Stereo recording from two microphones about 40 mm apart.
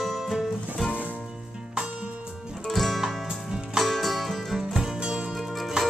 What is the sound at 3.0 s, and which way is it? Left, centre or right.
Music, centre.